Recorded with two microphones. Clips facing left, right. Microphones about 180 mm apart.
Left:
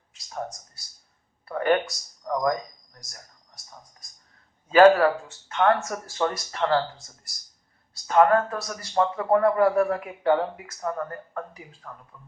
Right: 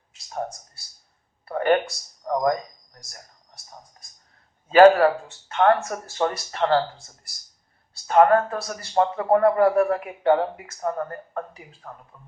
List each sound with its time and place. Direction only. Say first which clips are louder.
1.5 s a sound: right 2 dB; 30° right (ahead or behind)
4.7 s speech: right 2 dB; 35° right (ahead or behind)
8.0 s a man's voice: right 2 dB; 30° right (ahead or behind)